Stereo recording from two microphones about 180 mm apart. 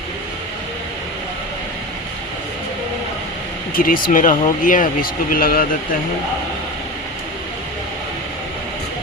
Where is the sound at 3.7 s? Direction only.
50° left (ahead or behind).